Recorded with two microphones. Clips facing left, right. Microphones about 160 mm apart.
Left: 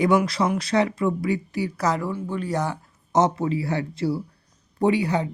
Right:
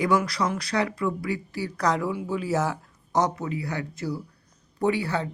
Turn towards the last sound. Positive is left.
turn(degrees=15)  # may be behind; listen again after turning